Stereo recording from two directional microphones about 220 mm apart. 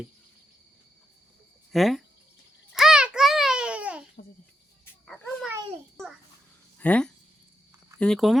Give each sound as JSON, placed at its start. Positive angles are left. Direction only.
{"t": 1.7, "sound": "speech", "side_deg": 0}
{"t": 2.7, "sound": "babbling", "side_deg": 0}
{"t": 5.0, "sound": "a sound", "side_deg": 5}
{"t": 6.7, "sound": "speech", "side_deg": 5}